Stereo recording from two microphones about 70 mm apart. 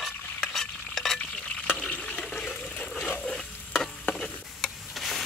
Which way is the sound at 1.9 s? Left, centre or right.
Left.